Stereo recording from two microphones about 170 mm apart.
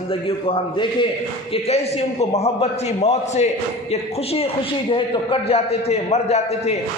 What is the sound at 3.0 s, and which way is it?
Speech, 40° left (ahead or behind).